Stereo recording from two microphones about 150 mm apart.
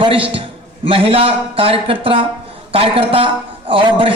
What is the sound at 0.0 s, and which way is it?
A man's voice, 35° right (ahead or behind).